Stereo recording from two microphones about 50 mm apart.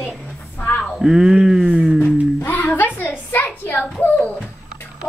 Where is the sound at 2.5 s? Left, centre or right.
Left.